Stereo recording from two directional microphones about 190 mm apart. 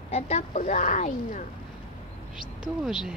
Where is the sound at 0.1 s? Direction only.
35° left (ahead or behind).